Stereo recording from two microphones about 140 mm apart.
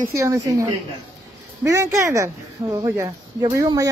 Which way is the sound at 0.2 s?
25° right (ahead or behind).